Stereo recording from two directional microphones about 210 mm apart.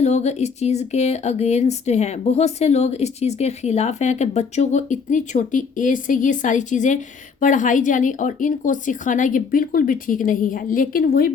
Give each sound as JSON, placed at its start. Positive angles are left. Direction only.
{"t": 0.0, "sound": "speech", "side_deg": 30}